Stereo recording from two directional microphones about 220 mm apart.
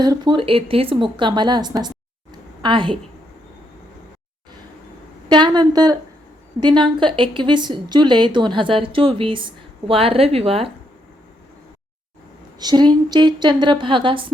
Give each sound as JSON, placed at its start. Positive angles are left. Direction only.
{"t": 0.0, "sound": "a woman's voice", "side_deg": -20}
{"t": 5.3, "sound": "speech", "side_deg": -20}
{"t": 12.5, "sound": "speech", "side_deg": -20}